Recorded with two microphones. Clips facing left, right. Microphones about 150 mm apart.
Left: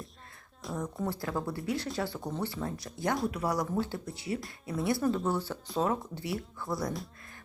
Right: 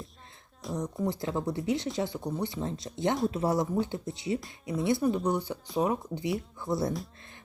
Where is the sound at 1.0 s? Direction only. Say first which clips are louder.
Right 3 dB; 20° right (ahead or behind).